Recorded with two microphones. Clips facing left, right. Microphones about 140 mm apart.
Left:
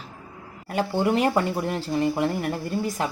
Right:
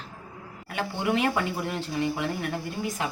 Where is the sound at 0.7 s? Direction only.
40° left (ahead or behind).